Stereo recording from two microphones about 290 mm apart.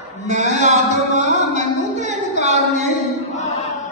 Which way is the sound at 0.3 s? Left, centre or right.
Right.